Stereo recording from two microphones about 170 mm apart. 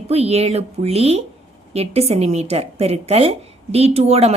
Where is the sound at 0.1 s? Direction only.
35° right (ahead or behind).